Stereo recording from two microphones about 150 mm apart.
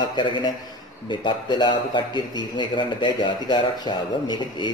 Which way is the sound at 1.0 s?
35° left (ahead or behind).